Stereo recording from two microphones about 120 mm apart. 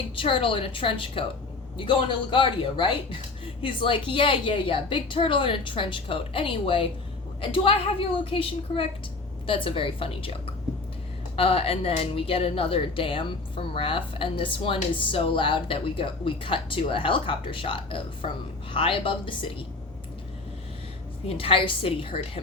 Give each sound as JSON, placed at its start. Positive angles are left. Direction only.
{"t": 0.2, "sound": "speech", "side_deg": 45}
{"t": 21.2, "sound": "speech", "side_deg": 50}